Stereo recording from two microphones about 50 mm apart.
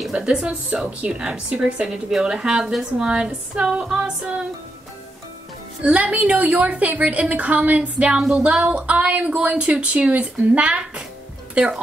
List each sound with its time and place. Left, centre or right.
0.1 s a woman's voice: centre
5.8 s a woman's voice: right